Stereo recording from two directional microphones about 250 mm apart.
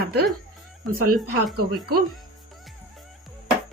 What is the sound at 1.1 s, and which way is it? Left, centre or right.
Speech, right.